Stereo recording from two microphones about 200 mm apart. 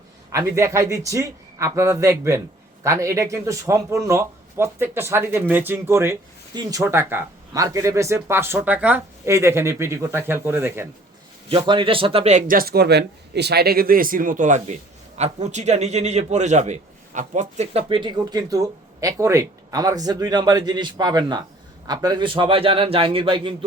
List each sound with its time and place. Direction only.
0.3 s speech: 15° right (ahead or behind)
11.4 s a man's voice: 25° right (ahead or behind)